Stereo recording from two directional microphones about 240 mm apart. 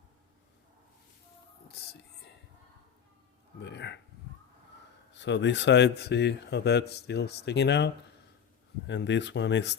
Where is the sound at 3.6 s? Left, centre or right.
Left.